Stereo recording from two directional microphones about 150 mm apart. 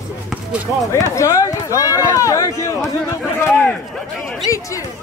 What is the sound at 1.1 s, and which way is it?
Speech, 20° left (ahead or behind).